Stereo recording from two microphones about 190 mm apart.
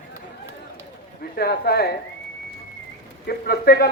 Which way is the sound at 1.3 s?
55° left (ahead or behind).